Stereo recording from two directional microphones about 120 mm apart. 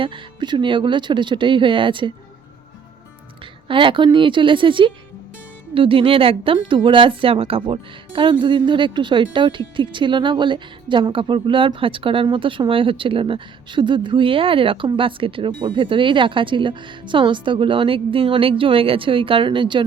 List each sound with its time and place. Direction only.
0.0 s speech: 45° right (ahead or behind)
3.7 s speech: 45° right (ahead or behind)